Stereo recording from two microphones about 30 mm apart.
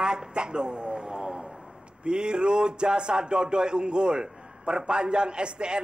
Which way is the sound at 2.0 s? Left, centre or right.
Right.